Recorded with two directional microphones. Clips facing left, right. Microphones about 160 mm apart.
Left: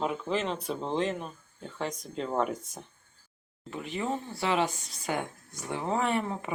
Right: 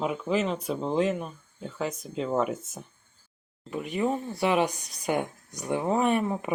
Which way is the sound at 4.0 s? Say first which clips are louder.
Right 5 dB; 15° right (ahead or behind).